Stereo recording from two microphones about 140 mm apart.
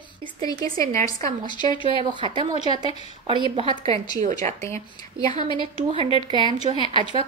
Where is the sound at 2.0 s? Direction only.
35° right (ahead or behind).